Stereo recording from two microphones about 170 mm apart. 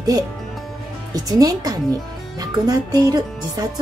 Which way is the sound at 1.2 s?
20° right (ahead or behind).